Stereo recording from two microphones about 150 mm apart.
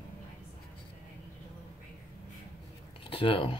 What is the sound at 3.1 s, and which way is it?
Speech, 40° left (ahead or behind).